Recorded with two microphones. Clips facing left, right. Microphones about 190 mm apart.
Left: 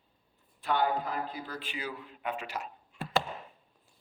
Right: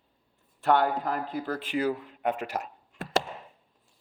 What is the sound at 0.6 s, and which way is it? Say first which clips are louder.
A man's voice: right 5 dB; 65° right (ahead or behind).